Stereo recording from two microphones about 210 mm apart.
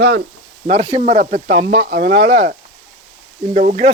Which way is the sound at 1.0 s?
30° right (ahead or behind).